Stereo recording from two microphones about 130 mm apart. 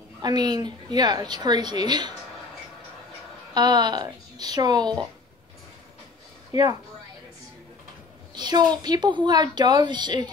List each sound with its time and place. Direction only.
0.2 s a woman's voice: 35° right (ahead or behind)
3.5 s a woman's voice: 30° right (ahead or behind)
6.5 s a woman's voice: 30° right (ahead or behind)
8.4 s a woman's voice: 35° right (ahead or behind)